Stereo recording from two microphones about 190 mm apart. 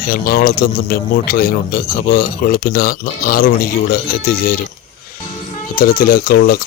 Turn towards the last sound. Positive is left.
turn(degrees=55)  # may be behind; listen again after turning